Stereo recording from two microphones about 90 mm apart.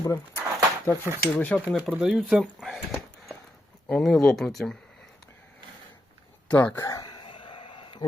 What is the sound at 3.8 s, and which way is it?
Speech, 5° left (ahead or behind).